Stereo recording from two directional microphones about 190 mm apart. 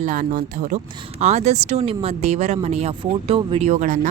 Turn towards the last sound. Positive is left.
turn(degrees=-40)  # may be behind; listen again after turning